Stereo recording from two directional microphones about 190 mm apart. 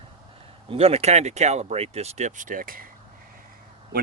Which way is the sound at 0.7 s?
30° right (ahead or behind).